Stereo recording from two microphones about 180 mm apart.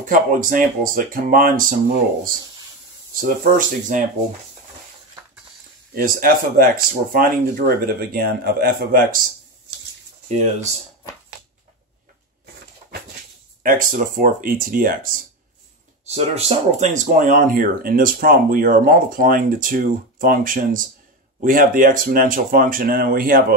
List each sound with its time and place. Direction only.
0.0 s speech: 50° right (ahead or behind)
3.2 s speech: 50° right (ahead or behind)
5.9 s speech: 50° right (ahead or behind)
10.2 s speech: 40° right (ahead or behind)
13.6 s speech: 50° right (ahead or behind)
16.1 s speech: 35° right (ahead or behind); by 23.4 s 50° right (ahead or behind)